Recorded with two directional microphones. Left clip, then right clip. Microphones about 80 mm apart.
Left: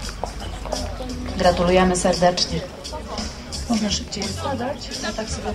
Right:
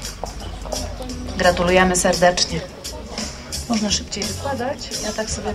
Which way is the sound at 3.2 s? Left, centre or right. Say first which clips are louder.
Right 2 dB; right.